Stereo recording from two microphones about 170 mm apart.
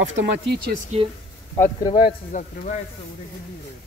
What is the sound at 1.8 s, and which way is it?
Speech, 30° left (ahead or behind).